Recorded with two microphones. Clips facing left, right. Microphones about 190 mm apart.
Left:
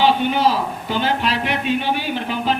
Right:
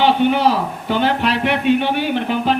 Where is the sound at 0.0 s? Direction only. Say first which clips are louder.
Right 2 dB; 60° right (ahead or behind).